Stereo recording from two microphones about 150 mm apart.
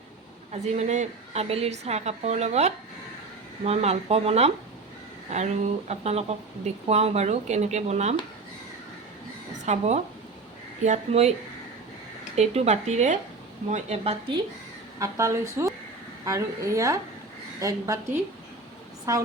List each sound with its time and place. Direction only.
0.5 s a woman's voice: 45° right (ahead or behind)
9.6 s a woman's voice: 50° right (ahead or behind)
12.4 s a woman's voice: 45° right (ahead or behind)
14.9 s a woman's voice: 20° right (ahead or behind)